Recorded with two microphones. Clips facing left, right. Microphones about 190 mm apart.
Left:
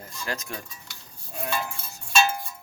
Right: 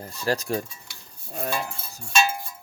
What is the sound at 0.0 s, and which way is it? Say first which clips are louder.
Cowbell: right 8 dB; 35° right (ahead or behind).